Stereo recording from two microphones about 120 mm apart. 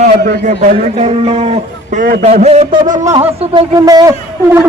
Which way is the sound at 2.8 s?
90° right.